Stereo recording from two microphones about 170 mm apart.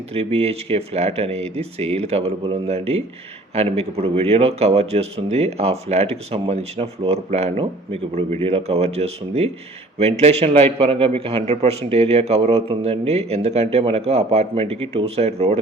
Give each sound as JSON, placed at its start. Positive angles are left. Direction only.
{"t": 0.1, "sound": "a man's voice", "side_deg": -35}